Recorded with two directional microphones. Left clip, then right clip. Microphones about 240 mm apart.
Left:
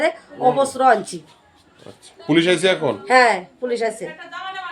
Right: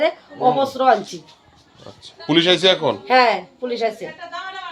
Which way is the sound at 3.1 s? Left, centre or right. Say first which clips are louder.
Left 1 dB; centre.